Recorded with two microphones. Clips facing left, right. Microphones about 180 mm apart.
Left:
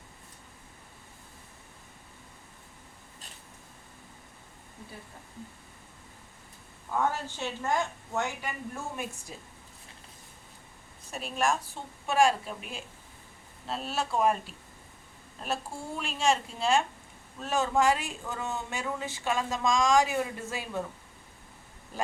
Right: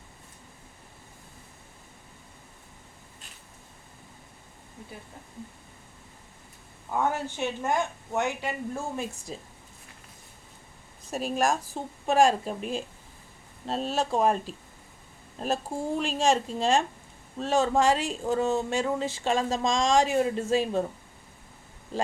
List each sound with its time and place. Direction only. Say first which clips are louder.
7.1 s speech: right 5 dB; 20° right (ahead or behind)
11.1 s speech: right 3 dB; 40° right (ahead or behind)
16.0 s speech: right 3 dB; 35° right (ahead or behind)